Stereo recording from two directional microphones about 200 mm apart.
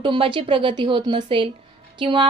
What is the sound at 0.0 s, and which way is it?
A woman's voice, 25° right (ahead or behind).